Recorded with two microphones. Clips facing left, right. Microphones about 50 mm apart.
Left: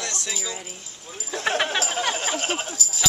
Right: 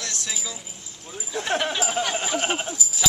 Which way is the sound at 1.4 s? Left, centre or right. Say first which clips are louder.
Left 2 dB; left.